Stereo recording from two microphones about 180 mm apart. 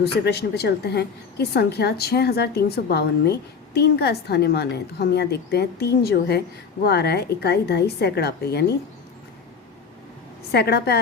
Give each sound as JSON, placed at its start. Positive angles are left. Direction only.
{"t": 0.0, "sound": "a woman's voice", "side_deg": 65}
{"t": 10.5, "sound": "a woman's voice", "side_deg": 65}